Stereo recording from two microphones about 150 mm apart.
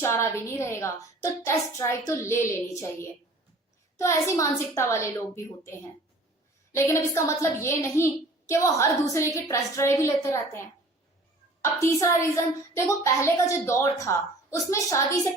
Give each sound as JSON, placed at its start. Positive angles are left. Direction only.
{"t": 0.0, "sound": "a woman's voice", "side_deg": 20}
{"t": 3.9, "sound": "a woman's voice", "side_deg": 20}
{"t": 6.7, "sound": "a woman's voice", "side_deg": 15}
{"t": 11.6, "sound": "a woman's voice", "side_deg": 20}